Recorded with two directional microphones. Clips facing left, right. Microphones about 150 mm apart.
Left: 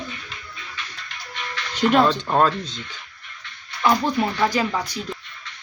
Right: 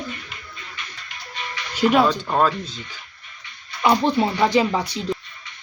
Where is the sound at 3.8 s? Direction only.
20° right (ahead or behind).